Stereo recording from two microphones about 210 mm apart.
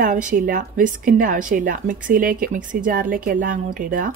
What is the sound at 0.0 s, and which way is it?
A woman's voice, 40° right (ahead or behind).